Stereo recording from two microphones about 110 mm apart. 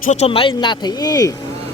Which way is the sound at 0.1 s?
90° left.